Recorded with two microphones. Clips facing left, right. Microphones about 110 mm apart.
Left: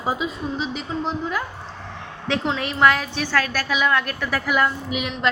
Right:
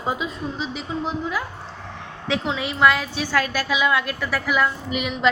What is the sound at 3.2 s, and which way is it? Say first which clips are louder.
A woman's voice: even; 15° right (ahead or behind).